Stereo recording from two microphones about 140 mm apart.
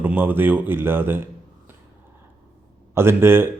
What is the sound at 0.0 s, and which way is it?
A man's voice, 15° right (ahead or behind).